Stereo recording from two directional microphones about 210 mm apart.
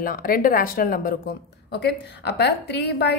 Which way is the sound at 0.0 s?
40° left (ahead or behind).